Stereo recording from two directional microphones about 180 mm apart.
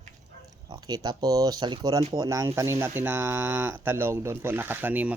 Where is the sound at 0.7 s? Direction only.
20° right (ahead or behind).